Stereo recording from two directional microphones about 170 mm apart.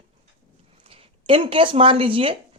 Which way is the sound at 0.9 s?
35° right (ahead or behind).